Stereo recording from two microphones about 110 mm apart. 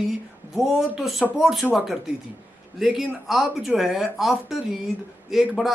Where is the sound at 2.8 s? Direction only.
5° right (ahead or behind).